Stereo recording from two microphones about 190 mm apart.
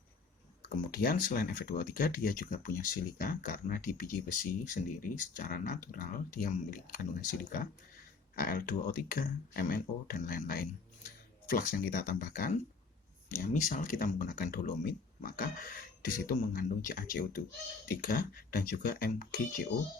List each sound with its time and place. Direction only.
0.9 s speech: 50° left (ahead or behind)